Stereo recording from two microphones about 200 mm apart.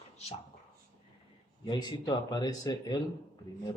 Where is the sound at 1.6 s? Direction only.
20° left (ahead or behind).